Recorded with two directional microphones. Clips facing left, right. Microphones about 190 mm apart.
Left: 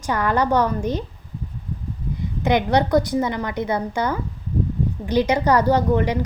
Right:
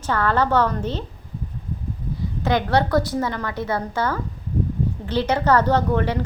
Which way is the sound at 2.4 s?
20° left (ahead or behind).